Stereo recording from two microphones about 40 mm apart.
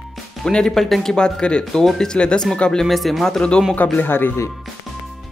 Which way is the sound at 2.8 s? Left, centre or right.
Centre.